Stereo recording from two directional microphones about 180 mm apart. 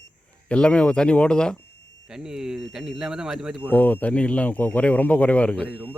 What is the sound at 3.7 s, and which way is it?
Speech, 10° left (ahead or behind).